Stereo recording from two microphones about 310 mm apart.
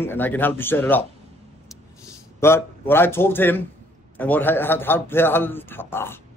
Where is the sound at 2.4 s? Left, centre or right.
Centre.